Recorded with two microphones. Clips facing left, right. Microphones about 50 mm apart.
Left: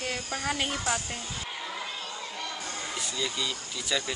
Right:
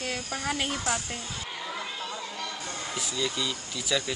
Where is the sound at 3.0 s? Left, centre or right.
Centre.